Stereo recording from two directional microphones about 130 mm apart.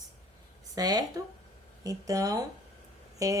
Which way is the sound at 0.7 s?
30° right (ahead or behind).